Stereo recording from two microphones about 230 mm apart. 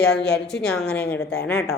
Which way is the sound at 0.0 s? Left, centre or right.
Centre.